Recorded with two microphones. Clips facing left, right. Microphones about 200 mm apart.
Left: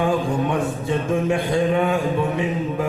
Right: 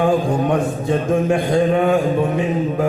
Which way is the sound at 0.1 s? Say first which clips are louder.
Right 4 dB; 45° right (ahead or behind).